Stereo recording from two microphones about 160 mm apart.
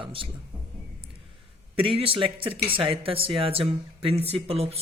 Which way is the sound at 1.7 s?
35° right (ahead or behind).